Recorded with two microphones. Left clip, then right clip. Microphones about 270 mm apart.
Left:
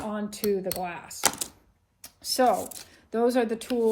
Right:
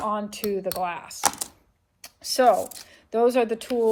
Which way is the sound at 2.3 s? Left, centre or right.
Right.